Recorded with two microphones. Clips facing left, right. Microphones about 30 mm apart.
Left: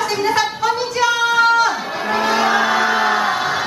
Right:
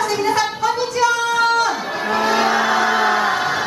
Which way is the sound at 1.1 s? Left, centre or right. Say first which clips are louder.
Left 2 dB; centre.